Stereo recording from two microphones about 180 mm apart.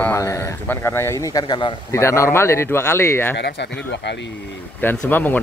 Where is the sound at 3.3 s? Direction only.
70° left (ahead or behind).